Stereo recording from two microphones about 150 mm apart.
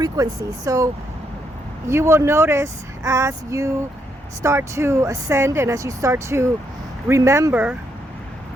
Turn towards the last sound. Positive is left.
turn(degrees=-10)  # may be behind; listen again after turning